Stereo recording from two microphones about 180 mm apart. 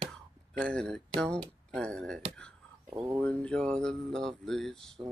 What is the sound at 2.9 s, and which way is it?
Speech, 10° right (ahead or behind).